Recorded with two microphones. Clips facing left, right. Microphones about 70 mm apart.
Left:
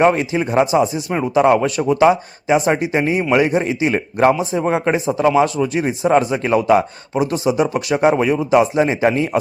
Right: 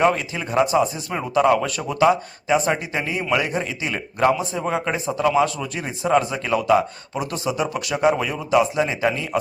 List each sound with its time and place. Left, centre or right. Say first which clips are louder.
0.0 s speech: left 5 dB; left
4.6 s speech: left 6 dB; left
7.2 s speech: left 7 dB; left